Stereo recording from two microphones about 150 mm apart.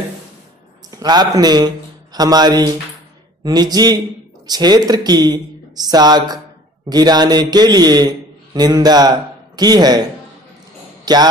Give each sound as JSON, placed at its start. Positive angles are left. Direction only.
{"t": 0.9, "sound": "speech", "side_deg": -25}
{"t": 11.1, "sound": "speech", "side_deg": -25}